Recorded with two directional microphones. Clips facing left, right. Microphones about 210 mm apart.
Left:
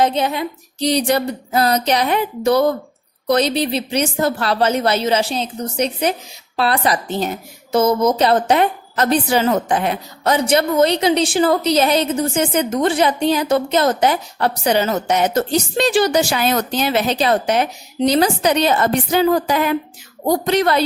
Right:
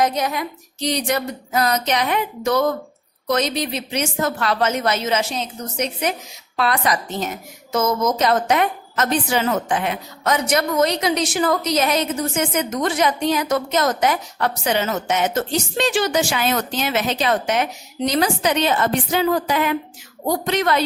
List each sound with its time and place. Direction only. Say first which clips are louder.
0.0 s a woman's voice: left 3 dB; 30° left (ahead or behind)